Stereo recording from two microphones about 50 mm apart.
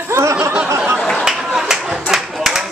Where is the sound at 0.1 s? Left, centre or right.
Right.